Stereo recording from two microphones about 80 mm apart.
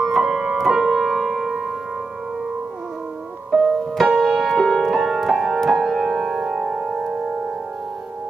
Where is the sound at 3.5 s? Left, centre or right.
Centre.